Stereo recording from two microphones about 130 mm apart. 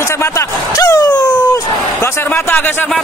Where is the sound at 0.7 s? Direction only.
25° left (ahead or behind).